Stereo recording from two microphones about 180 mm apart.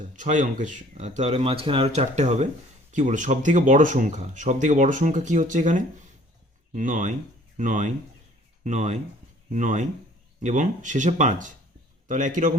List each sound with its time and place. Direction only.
0.2 s speech: 45° right (ahead or behind)